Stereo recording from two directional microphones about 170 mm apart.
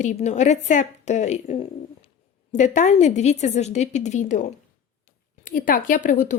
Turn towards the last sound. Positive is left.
turn(degrees=50)  # may be behind; listen again after turning